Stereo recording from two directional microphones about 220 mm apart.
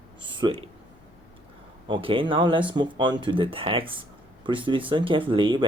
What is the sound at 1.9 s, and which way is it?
Speech, 25° right (ahead or behind).